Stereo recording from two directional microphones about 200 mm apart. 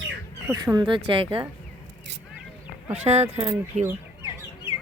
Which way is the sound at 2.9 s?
35° right (ahead or behind).